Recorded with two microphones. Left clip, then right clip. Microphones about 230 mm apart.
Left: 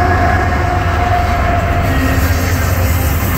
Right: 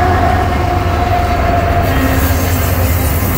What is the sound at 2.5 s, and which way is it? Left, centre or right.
Vehicle, right.